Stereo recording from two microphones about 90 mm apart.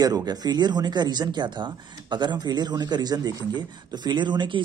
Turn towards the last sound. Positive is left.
turn(degrees=-60)  # may be behind; listen again after turning